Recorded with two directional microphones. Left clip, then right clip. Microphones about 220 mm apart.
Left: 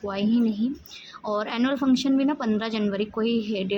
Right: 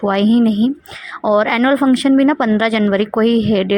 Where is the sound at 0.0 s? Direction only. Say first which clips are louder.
Right 11 dB; 35° right (ahead or behind).